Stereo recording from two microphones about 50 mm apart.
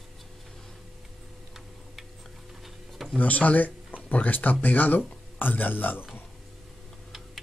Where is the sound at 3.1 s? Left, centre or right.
Left.